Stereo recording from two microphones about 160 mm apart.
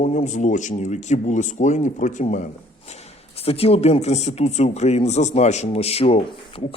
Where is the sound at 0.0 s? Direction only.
50° left (ahead or behind).